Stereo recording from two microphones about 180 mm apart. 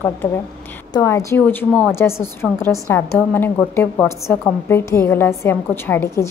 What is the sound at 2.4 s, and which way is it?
Speech, 5° right (ahead or behind).